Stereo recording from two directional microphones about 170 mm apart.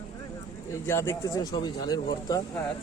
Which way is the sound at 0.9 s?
15° left (ahead or behind).